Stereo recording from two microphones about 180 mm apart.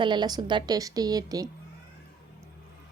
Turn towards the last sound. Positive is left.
turn(degrees=-20)  # may be behind; listen again after turning